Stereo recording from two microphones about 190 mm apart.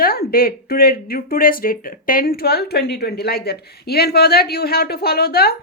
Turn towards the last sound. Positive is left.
turn(degrees=55)  # may be behind; listen again after turning